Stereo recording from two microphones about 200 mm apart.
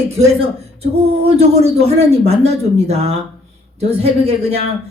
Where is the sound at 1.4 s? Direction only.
30° right (ahead or behind).